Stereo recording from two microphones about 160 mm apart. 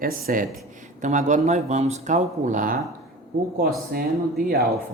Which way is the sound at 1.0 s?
50° right (ahead or behind).